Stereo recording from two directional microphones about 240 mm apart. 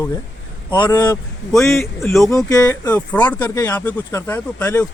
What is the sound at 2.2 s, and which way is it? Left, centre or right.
Speech, centre.